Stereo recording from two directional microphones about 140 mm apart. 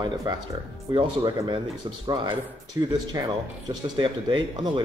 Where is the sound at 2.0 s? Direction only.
35° right (ahead or behind).